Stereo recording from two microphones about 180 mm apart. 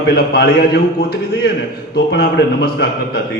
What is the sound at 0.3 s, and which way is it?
Speech, 65° left (ahead or behind).